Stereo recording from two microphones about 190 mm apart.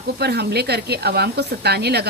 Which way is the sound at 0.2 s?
60° right (ahead or behind).